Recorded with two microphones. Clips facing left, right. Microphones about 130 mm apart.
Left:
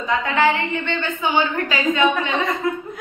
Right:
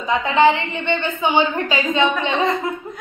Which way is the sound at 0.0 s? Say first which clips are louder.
Right 3 dB; 20° right (ahead or behind).